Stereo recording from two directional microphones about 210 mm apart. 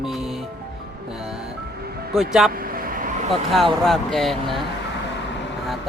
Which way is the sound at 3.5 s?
Centre (ahead or behind).